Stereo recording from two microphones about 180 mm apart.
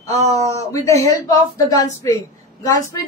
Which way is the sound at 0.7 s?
15° left (ahead or behind).